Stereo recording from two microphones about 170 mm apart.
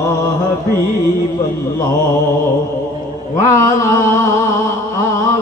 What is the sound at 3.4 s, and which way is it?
Mantra, 20° left (ahead or behind).